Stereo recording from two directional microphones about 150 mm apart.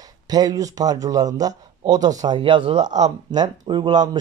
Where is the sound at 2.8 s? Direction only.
50° right (ahead or behind).